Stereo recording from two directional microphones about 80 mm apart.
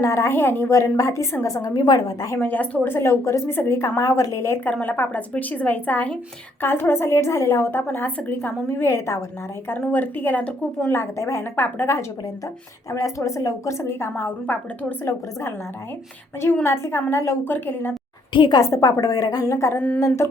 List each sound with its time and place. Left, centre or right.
0.0 s a woman's voice: left
0.7 s a woman's voice: left
2.4 s a woman's voice: left
4.6 s a woman's voice: left
8.8 s a woman's voice: left
9.6 s a woman's voice: left
10.9 s a woman's voice: left
12.9 s a woman's voice: left
16.6 s a woman's voice: left
18.3 s a woman's voice: left
18.6 s a woman's voice: left
19.7 s a woman's voice: centre
20.0 s a woman's voice: left